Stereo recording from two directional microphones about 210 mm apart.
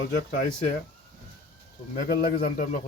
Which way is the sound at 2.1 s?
45° left (ahead or behind).